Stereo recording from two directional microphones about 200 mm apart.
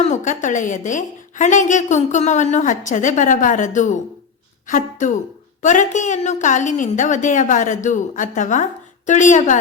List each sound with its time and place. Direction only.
0.0 s a woman's voice: 35° left (ahead or behind)